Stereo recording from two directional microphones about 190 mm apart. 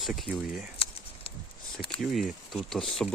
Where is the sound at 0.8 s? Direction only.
30° left (ahead or behind).